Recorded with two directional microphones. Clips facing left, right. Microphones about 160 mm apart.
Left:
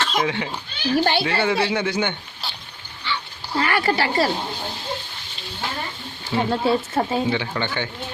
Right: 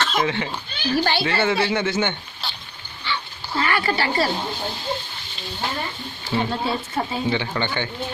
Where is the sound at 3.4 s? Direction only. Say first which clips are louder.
Left 2 dB; 40° left (ahead or behind).